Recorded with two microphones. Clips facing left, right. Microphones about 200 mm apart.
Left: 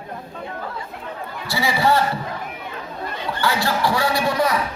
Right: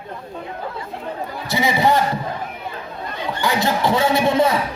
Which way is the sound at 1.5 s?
20° right (ahead or behind).